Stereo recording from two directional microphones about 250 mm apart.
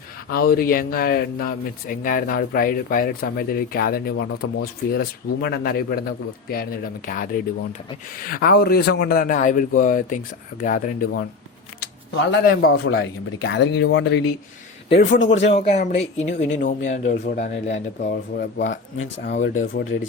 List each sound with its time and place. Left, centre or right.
0.5 s speech: left
11.8 s speech: left
15.4 s speech: left
16.0 s speech: left
16.9 s speech: left
19.5 s speech: left